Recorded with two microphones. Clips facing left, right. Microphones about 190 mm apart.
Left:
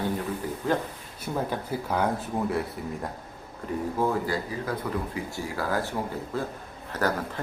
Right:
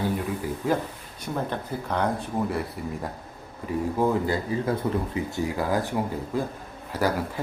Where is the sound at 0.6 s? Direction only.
10° right (ahead or behind).